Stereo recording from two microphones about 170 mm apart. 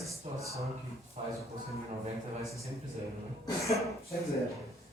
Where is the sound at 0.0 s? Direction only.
20° right (ahead or behind).